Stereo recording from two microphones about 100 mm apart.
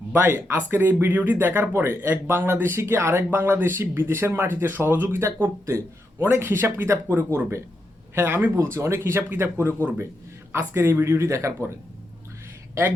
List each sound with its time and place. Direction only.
0.1 s speech: 20° right (ahead or behind)